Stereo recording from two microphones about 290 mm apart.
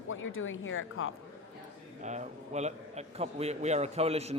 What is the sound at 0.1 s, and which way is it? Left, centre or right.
Speech, left.